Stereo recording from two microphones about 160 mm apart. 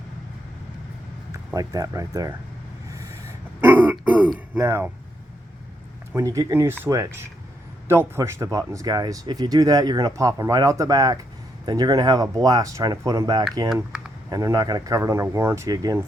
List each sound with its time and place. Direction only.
1.5 s speech: 20° right (ahead or behind)
3.6 s throat clearing: 10° right (ahead or behind)
4.6 s speech: 15° right (ahead or behind)
6.1 s speech: 20° right (ahead or behind)